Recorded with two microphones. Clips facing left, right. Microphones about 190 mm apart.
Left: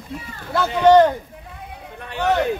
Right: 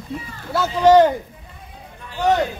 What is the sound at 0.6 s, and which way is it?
Speech, 5° right (ahead or behind).